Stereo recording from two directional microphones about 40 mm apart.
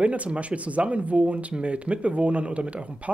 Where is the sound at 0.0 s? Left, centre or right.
Right.